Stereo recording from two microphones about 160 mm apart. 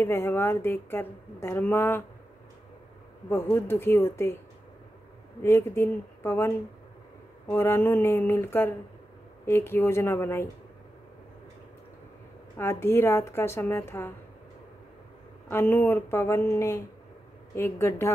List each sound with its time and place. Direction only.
0.0 s speech: 15° left (ahead or behind)
3.3 s speech: 15° left (ahead or behind)
5.4 s speech: 15° left (ahead or behind)
12.5 s speech: 15° left (ahead or behind)
15.5 s speech: 15° left (ahead or behind)